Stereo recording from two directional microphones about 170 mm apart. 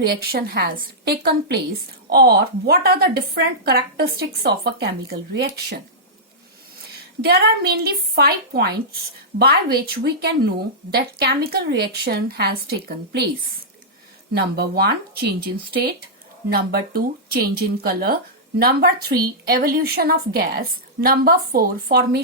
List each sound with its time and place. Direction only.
0.1 s a woman's voice: 65° right (ahead or behind)
7.2 s a woman's voice: 65° right (ahead or behind)
14.3 s a woman's voice: 70° right (ahead or behind)